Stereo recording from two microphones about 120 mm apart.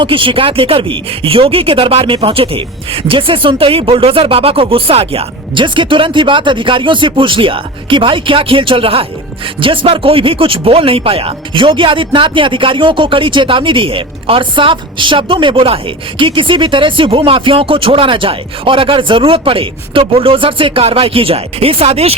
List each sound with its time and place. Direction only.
0.0 s speech: 45° right (ahead or behind)